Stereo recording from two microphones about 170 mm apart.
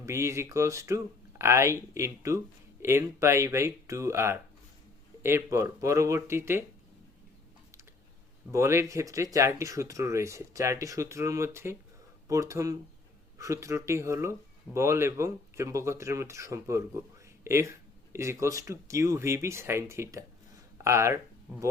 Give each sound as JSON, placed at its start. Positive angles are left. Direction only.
{"t": 0.0, "sound": "speech", "side_deg": -15}
{"t": 8.5, "sound": "speech", "side_deg": -15}